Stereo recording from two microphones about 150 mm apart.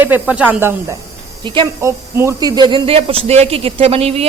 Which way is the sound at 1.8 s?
20° right (ahead or behind).